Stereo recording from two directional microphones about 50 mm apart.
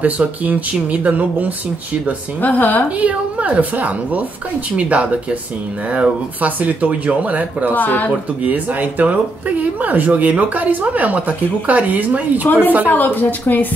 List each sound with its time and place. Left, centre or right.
0.0 s speech: right
2.4 s a woman's voice: left
3.0 s speech: right
7.7 s a woman's voice: left
8.4 s speech: right
12.4 s a woman's voice: left